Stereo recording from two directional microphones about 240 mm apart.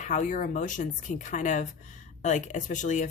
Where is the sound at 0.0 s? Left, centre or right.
Left.